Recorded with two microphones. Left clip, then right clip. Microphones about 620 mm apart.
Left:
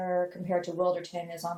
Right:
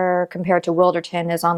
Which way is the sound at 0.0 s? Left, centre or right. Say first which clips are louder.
Right 10 dB; right.